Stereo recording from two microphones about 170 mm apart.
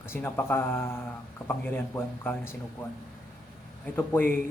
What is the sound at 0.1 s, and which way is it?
Speech, 10° left (ahead or behind).